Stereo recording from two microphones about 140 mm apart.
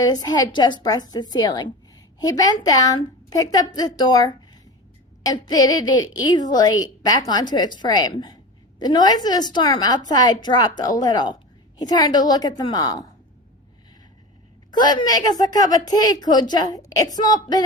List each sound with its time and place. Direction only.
0.0 s a woman's voice: 25° left (ahead or behind)
14.7 s a woman's voice: 30° left (ahead or behind)